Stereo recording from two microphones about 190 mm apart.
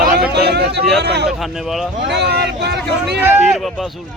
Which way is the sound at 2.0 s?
65° right (ahead or behind).